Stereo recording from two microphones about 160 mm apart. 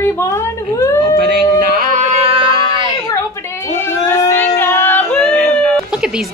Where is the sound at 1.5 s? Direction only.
50° right (ahead or behind); by 2.8 s 30° right (ahead or behind).